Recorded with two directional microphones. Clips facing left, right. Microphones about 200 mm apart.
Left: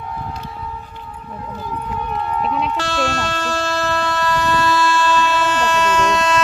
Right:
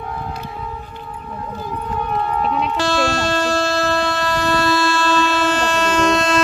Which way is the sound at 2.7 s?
35° right (ahead or behind).